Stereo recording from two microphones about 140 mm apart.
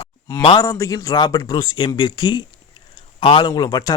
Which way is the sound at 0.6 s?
25° left (ahead or behind).